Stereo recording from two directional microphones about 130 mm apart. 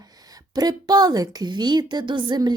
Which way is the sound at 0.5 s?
30° right (ahead or behind).